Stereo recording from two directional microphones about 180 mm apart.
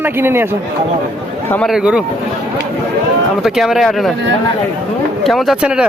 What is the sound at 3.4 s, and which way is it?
Speech, centre (ahead or behind).